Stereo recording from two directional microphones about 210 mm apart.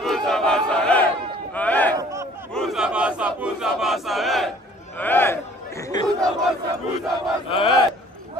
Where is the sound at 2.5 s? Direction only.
Centre (ahead or behind).